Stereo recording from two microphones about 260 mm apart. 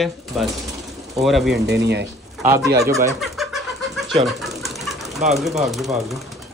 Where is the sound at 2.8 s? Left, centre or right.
Centre.